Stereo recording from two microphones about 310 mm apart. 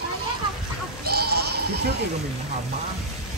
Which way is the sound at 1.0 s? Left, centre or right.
Right.